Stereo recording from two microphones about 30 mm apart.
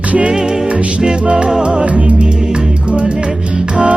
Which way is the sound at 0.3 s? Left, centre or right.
Centre.